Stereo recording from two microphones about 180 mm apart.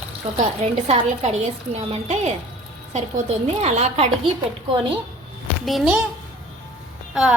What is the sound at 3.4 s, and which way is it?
Speech, 35° right (ahead or behind).